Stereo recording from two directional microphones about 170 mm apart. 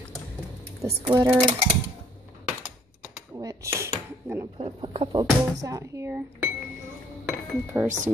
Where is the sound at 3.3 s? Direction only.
15° right (ahead or behind).